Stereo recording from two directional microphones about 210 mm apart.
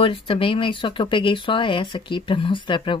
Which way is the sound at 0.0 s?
25° left (ahead or behind).